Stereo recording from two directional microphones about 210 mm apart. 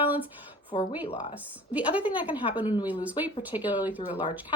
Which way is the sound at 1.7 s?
5° right (ahead or behind).